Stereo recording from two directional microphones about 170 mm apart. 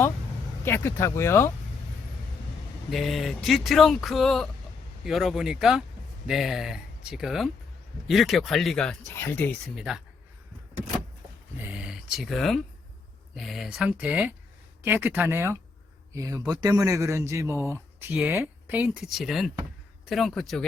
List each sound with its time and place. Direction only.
0.6 s speech: 15° left (ahead or behind)
2.9 s speech: centre (ahead or behind)
9.1 s speech: 15° left (ahead or behind)
9.7 s speech: 5° right (ahead or behind)
11.5 s a man's voice: 10° right (ahead or behind)